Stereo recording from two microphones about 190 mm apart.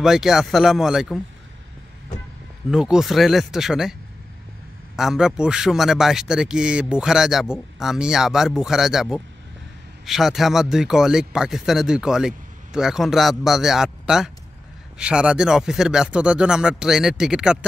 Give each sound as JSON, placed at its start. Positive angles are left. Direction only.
{"t": 0.0, "sound": "speech", "side_deg": 0}
{"t": 2.7, "sound": "speech", "side_deg": -5}
{"t": 4.9, "sound": "speech", "side_deg": -5}